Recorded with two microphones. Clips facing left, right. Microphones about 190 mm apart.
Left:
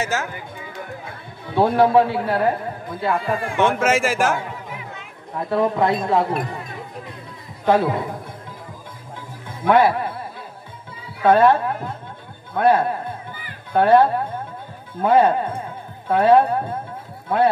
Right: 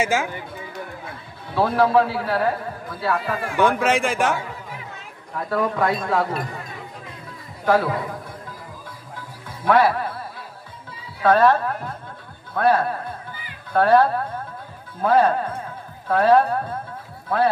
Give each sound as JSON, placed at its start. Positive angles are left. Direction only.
{"t": 0.0, "sound": "speech", "side_deg": -10}
{"t": 1.5, "sound": "a man's voice", "side_deg": 25}
{"t": 3.6, "sound": "a man's voice", "side_deg": 0}
{"t": 5.3, "sound": "a man's voice", "side_deg": 25}
{"t": 7.6, "sound": "speech", "side_deg": 20}
{"t": 9.7, "sound": "a man's voice", "side_deg": 25}
{"t": 11.2, "sound": "a man's voice", "side_deg": 25}